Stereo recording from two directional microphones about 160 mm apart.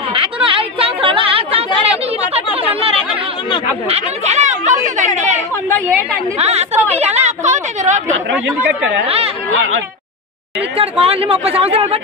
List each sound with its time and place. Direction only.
0.1 s a sound: 35° right (ahead or behind)
2.7 s chatter: 35° right (ahead or behind)
3.9 s speech: 45° right (ahead or behind)
7.0 s chatter: 45° right (ahead or behind)
8.5 s speech: 10° right (ahead or behind)
9.0 s speech: 35° right (ahead or behind)
10.8 s speech: 35° right (ahead or behind)